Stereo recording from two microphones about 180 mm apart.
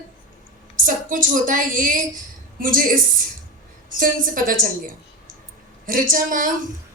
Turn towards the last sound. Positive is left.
turn(degrees=-50)  # may be behind; listen again after turning